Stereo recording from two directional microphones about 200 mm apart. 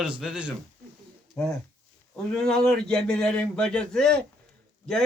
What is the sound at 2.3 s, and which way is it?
Speech, 5° left (ahead or behind).